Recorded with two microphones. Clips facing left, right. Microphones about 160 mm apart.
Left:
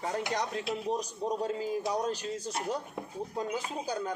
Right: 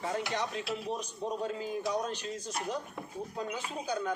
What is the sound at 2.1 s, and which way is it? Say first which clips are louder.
Speech: left 2 dB; 35° left (ahead or behind).